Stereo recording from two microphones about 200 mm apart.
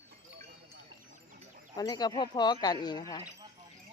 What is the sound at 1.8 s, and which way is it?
Speech, 20° left (ahead or behind).